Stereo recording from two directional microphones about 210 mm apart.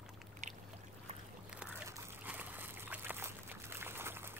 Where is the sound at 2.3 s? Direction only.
10° right (ahead or behind).